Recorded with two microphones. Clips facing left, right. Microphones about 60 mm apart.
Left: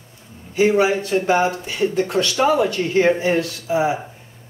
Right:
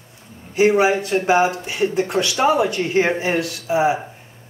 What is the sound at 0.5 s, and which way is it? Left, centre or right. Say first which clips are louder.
Speech: right 1 dB; centre.